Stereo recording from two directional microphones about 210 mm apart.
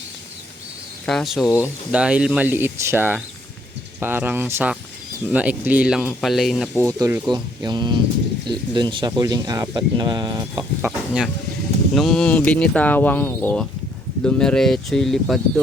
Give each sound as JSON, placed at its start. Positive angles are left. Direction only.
{"t": 1.0, "sound": "speech", "side_deg": 0}
{"t": 6.7, "sound": "speech", "side_deg": -15}
{"t": 10.8, "sound": "a sound", "side_deg": -5}
{"t": 11.9, "sound": "speech", "side_deg": 0}